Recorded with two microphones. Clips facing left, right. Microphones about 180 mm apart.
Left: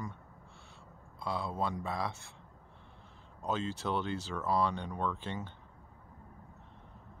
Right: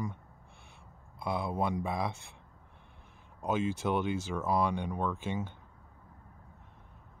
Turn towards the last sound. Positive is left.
turn(degrees=-10)  # may be behind; listen again after turning